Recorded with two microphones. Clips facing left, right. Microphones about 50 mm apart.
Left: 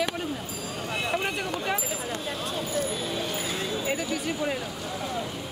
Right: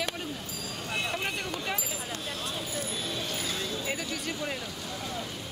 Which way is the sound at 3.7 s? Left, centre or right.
Centre.